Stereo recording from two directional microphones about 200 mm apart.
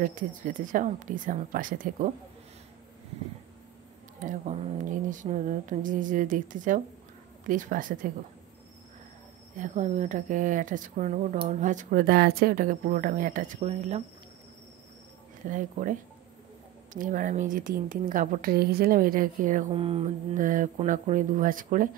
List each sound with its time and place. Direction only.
0.0 s speech: 40° right (ahead or behind)
4.2 s speech: 40° right (ahead or behind)
9.6 s speech: 35° right (ahead or behind)
15.4 s speech: 40° right (ahead or behind)
19.7 s mantra: 25° right (ahead or behind)
20.3 s speech: 40° right (ahead or behind)